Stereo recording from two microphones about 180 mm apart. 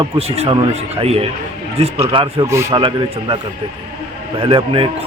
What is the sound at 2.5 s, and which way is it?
Speech, 15° right (ahead or behind).